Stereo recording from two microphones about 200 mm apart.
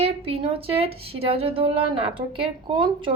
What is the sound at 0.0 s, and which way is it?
Speech, 30° right (ahead or behind).